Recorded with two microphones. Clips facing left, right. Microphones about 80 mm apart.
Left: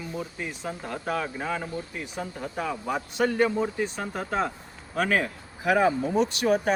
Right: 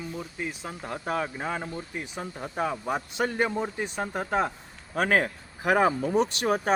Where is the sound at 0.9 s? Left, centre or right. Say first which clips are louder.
Right 1 dB; centre.